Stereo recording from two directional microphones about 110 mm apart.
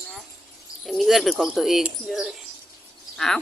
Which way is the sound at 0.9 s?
Centre (ahead or behind).